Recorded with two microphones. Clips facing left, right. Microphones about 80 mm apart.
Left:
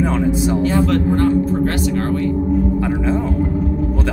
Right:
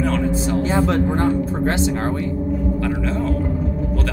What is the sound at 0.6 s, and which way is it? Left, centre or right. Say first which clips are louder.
Speech: left 2 dB; right.